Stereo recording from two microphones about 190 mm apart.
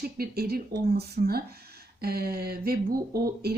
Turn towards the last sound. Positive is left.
turn(degrees=-55)  # may be behind; listen again after turning